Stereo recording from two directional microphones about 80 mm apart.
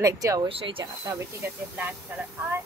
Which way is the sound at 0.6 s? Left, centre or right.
Right.